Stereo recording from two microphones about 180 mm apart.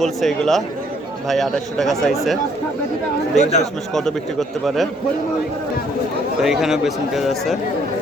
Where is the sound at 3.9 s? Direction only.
5° left (ahead or behind).